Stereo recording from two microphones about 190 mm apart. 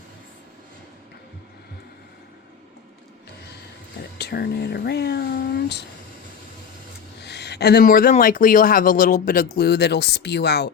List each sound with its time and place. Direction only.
4.2 s speech: 55° left (ahead or behind)
7.2 s speech: 60° left (ahead or behind)